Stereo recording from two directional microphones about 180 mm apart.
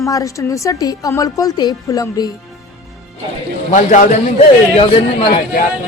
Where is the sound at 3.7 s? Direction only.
45° left (ahead or behind).